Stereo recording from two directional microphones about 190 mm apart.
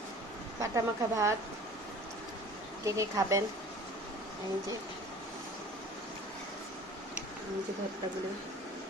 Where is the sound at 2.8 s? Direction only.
15° right (ahead or behind).